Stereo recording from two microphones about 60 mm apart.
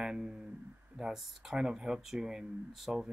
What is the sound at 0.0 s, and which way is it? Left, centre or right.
Speech, centre.